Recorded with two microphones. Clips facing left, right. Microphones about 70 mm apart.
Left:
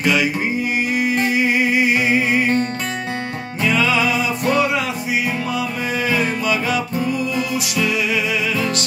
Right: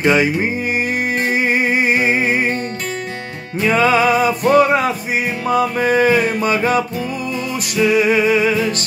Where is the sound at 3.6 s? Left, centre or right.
Right.